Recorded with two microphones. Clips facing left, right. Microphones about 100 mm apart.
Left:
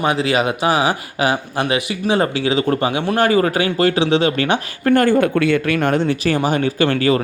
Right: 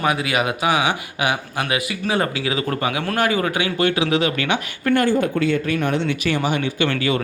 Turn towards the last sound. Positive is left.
turn(degrees=40)  # may be behind; listen again after turning